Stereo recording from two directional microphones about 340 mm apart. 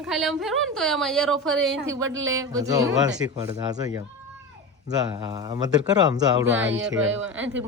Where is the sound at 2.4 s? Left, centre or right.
Centre.